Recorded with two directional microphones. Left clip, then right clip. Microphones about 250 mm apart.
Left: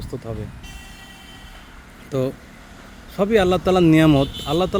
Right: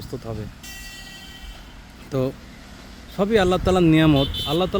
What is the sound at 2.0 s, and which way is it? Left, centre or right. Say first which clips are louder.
Speech: left 1 dB; centre.